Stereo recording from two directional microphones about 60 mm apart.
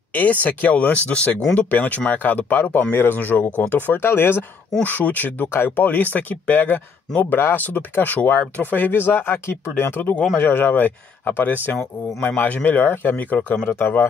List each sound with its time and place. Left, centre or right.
0.1 s speech: left
4.8 s speech: left
5.5 s speech: left
6.1 s speech: left
12.6 s speech: left